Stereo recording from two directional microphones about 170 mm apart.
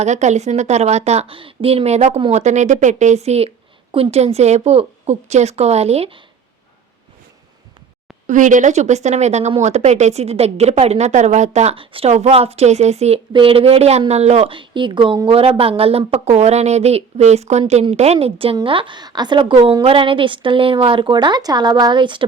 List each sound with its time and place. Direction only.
0.0 s a woman's voice: 45° right (ahead or behind)
8.3 s a woman's voice: 50° right (ahead or behind); by 22.3 s 30° right (ahead or behind)